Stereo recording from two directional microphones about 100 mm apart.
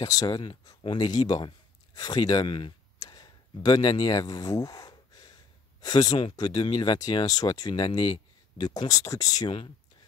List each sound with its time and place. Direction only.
0.0 s speech: 40° left (ahead or behind)
0.4 s speech: 50° left (ahead or behind)
2.4 s speech: 55° left (ahead or behind)
3.0 s a sound: 40° left (ahead or behind)
6.3 s speech: 45° left (ahead or behind)